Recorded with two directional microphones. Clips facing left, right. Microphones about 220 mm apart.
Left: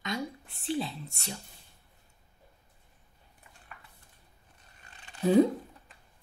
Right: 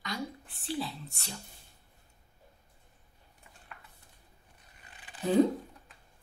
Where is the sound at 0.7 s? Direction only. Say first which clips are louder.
Left 3 dB; 20° left (ahead or behind).